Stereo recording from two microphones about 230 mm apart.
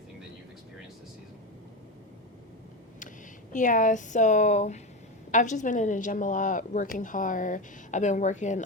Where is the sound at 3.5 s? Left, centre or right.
Left.